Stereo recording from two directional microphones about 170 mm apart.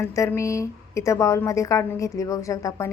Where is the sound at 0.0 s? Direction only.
15° left (ahead or behind).